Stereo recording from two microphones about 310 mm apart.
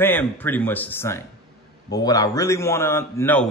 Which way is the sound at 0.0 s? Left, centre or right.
Centre.